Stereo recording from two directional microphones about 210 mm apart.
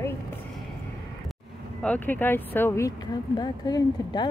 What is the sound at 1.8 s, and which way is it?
Speech, 5° left (ahead or behind).